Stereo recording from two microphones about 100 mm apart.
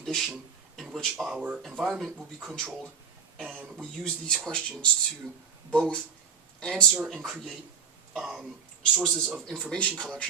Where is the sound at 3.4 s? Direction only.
15° right (ahead or behind).